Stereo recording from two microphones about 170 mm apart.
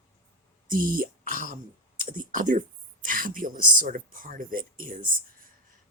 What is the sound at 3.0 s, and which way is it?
Speech, 55° right (ahead or behind).